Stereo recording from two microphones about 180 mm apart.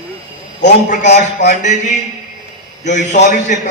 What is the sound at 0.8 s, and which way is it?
Speech, 40° left (ahead or behind).